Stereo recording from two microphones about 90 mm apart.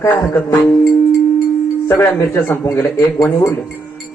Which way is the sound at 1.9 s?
30° left (ahead or behind).